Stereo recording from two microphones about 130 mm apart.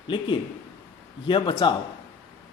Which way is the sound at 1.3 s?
40° left (ahead or behind).